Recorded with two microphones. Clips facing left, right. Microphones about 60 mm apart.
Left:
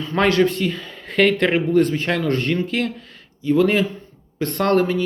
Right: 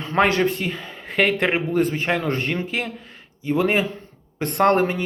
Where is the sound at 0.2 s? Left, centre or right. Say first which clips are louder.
Left 2 dB; right.